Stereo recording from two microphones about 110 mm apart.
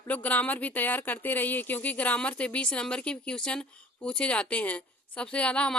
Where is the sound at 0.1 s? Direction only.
15° left (ahead or behind).